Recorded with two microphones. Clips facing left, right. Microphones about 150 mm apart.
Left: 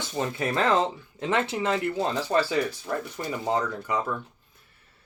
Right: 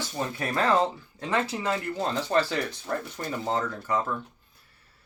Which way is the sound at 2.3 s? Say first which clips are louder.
Left 2 dB; 10° left (ahead or behind).